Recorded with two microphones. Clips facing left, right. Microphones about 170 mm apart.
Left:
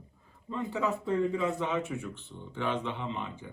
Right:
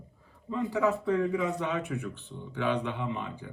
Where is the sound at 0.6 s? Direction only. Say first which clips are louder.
Right 4 dB; 20° left (ahead or behind).